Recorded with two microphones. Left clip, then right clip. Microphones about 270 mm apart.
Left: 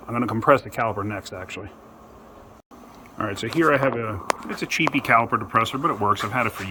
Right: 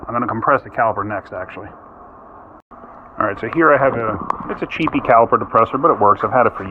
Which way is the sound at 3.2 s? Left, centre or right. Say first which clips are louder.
Right 7 dB; left.